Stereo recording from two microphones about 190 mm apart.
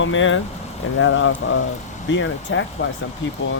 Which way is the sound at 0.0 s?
90° left.